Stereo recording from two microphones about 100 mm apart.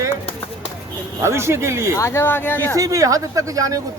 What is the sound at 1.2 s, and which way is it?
Speech, 25° right (ahead or behind).